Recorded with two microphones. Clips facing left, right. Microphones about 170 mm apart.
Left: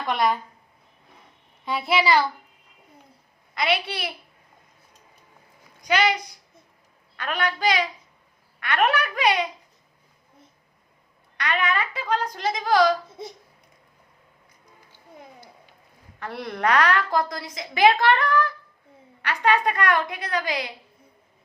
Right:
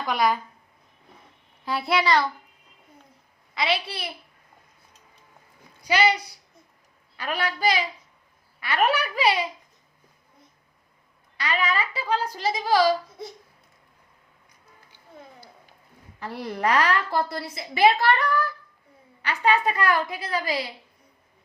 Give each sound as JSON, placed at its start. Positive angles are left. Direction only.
{"t": 0.0, "sound": "speech", "side_deg": 0}
{"t": 1.6, "sound": "speech", "side_deg": 0}
{"t": 5.9, "sound": "a woman's voice", "side_deg": -10}
{"t": 11.3, "sound": "speech", "side_deg": -5}
{"t": 13.2, "sound": "speech", "side_deg": 20}
{"t": 16.5, "sound": "a woman's voice", "side_deg": -5}